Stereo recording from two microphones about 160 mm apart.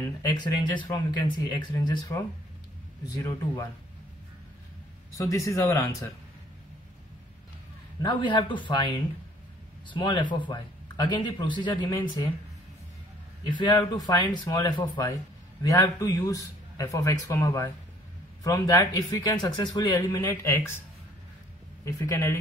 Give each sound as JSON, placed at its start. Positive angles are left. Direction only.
{"t": 0.3, "sound": "speech", "side_deg": 25}
{"t": 5.1, "sound": "speech", "side_deg": 20}
{"t": 8.0, "sound": "speech", "side_deg": 30}
{"t": 13.5, "sound": "speech", "side_deg": 30}
{"t": 21.8, "sound": "speech", "side_deg": 20}